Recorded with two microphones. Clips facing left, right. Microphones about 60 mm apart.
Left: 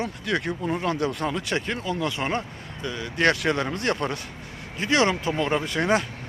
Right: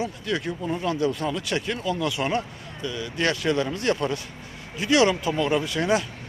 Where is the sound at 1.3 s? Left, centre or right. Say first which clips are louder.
Even; left.